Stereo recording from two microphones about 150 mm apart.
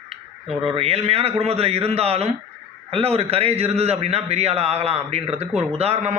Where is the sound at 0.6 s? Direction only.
40° right (ahead or behind).